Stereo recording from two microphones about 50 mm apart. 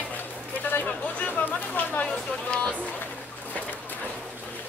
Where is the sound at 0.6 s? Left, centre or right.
Left.